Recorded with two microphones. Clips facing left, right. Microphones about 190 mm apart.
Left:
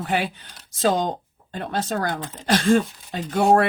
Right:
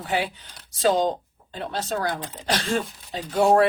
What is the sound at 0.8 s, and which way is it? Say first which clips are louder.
Speech: right 1 dB; 55° left (ahead or behind).